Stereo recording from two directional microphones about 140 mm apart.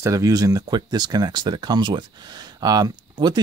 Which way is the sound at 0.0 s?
20° right (ahead or behind).